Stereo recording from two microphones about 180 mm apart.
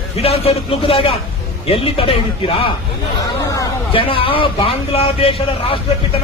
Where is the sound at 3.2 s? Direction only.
20° left (ahead or behind).